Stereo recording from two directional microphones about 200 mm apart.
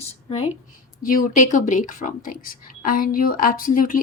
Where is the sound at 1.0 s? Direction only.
40° left (ahead or behind).